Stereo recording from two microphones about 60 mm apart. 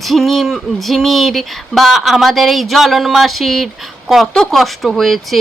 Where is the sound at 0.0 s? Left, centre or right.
Centre.